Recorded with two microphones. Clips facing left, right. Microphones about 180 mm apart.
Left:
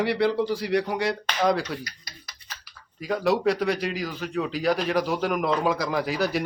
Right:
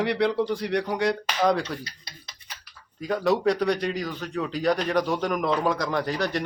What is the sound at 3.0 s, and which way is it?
Speech, centre (ahead or behind).